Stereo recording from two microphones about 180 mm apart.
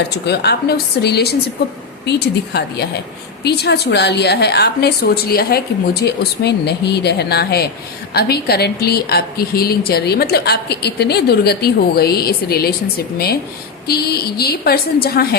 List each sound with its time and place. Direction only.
0.3 s a woman's voice: 65° left (ahead or behind)
13.8 s a woman's voice: 60° left (ahead or behind)